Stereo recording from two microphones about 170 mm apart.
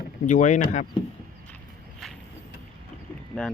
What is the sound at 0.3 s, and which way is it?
Speech, 45° left (ahead or behind).